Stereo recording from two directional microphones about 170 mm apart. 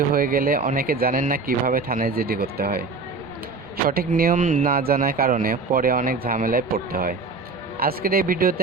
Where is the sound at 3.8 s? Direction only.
60° right (ahead or behind).